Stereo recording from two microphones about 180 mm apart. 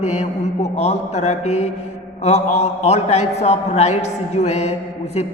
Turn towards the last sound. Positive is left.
turn(degrees=40)  # may be behind; listen again after turning